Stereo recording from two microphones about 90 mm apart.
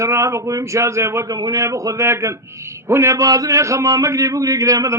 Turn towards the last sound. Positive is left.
turn(degrees=-40)  # may be behind; listen again after turning